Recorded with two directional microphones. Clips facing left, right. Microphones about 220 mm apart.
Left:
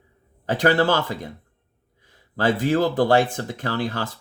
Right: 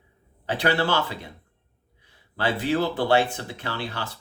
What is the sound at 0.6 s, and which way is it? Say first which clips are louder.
Speech: left 4 dB; 45° left (ahead or behind).